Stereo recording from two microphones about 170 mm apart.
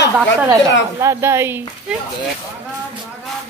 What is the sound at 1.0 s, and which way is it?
Speech, 15° right (ahead or behind).